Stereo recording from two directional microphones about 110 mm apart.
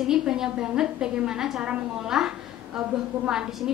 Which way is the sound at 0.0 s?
5° right (ahead or behind).